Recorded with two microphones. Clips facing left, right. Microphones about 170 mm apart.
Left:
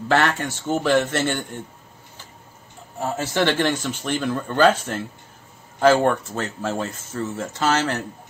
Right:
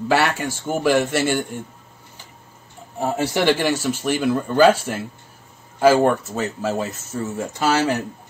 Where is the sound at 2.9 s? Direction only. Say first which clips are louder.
Right 2 dB; 15° right (ahead or behind).